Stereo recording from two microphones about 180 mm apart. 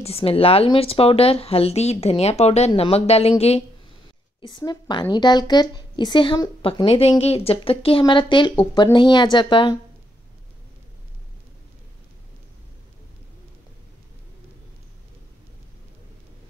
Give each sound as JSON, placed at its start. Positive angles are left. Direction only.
{"t": 0.0, "sound": "speech", "side_deg": 35}
{"t": 4.4, "sound": "a woman's voice", "side_deg": 25}